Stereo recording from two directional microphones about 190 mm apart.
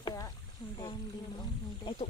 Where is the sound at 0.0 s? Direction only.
20° left (ahead or behind).